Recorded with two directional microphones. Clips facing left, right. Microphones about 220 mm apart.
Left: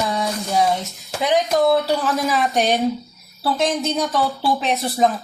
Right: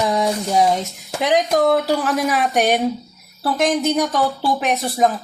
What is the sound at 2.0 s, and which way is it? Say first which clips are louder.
Speech: right 1 dB; 15° right (ahead or behind).